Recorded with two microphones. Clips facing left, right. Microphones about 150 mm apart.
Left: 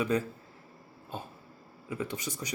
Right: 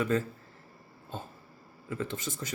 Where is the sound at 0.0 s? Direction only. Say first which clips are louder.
Even; 15° left (ahead or behind).